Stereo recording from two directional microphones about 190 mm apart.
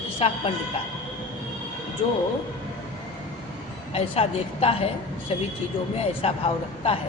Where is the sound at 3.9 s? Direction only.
30° left (ahead or behind).